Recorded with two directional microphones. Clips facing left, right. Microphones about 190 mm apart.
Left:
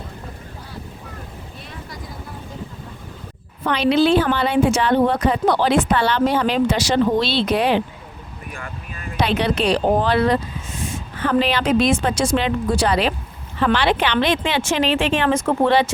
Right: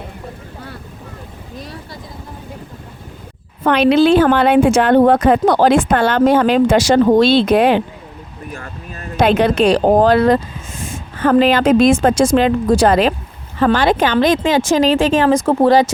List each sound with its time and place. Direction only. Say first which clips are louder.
3.6 s speech: right 5 dB; 55° right (ahead or behind); by 15.9 s 40° right (ahead or behind)